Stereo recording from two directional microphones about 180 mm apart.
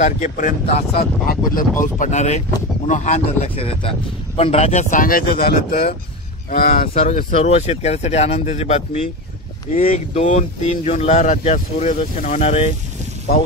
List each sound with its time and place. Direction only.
0.0 s speech: 45° left (ahead or behind)